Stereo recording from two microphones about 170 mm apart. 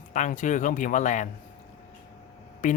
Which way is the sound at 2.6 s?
50° left (ahead or behind).